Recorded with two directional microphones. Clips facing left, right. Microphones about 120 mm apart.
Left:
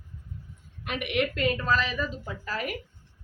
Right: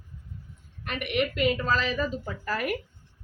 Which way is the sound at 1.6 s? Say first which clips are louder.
Even; 35° right (ahead or behind).